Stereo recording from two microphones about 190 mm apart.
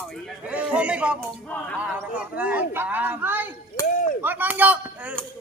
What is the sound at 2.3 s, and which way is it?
Speech, 5° right (ahead or behind).